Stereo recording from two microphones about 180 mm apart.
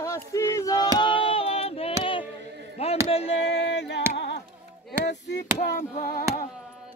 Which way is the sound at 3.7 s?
70° left (ahead or behind).